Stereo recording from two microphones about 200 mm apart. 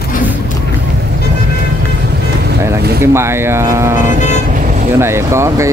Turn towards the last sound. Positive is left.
turn(degrees=-15)  # may be behind; listen again after turning